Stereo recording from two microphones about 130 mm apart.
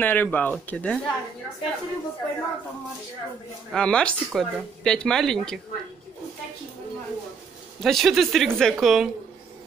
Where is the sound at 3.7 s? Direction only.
5° left (ahead or behind).